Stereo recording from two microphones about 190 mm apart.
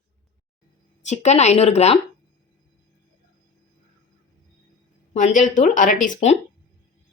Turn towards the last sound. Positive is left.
turn(degrees=40)  # may be behind; listen again after turning